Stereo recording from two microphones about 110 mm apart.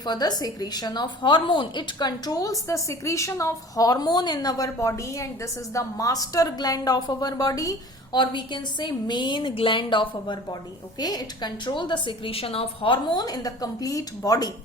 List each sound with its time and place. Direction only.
0.0 s a woman's voice: 40° left (ahead or behind)